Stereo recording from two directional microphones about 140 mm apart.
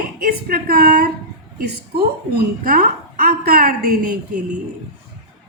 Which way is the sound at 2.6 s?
90° right.